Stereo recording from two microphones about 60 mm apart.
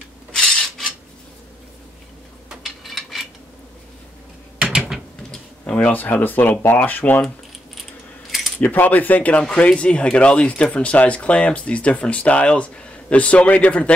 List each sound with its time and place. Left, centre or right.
0.3 s filing: centre
2.6 s a sound: centre
4.7 s a sound: centre
5.3 s computer keyboard: centre
5.9 s speech: left
8.5 s speech: left